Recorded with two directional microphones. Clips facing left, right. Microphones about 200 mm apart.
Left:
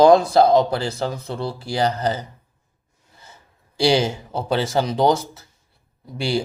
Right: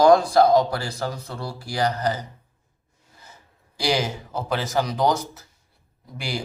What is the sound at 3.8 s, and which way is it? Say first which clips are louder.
Speech: left 6 dB; 30° left (ahead or behind).